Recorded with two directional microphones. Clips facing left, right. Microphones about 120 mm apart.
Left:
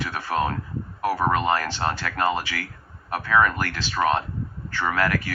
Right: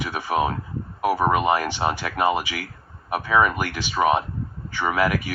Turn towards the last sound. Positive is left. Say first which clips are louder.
# right 2 dB
turn(degrees=-15)  # may be behind; listen again after turning